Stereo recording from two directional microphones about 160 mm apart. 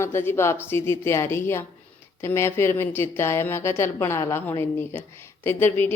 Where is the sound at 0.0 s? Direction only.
15° left (ahead or behind).